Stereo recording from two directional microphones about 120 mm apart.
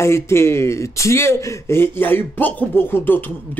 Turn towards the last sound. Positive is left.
turn(degrees=15)  # may be behind; listen again after turning